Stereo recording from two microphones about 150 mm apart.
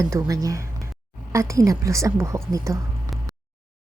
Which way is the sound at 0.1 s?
20° right (ahead or behind).